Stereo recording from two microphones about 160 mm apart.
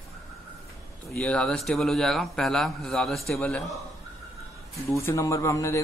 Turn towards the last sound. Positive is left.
turn(degrees=15)  # may be behind; listen again after turning